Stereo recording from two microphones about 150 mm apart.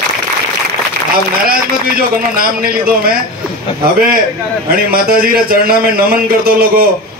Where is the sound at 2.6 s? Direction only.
80° right.